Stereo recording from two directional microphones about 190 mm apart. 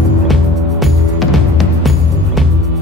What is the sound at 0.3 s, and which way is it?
Music, centre (ahead or behind).